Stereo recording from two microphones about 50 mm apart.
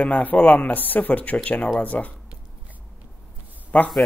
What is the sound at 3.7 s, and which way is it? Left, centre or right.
Speech, left.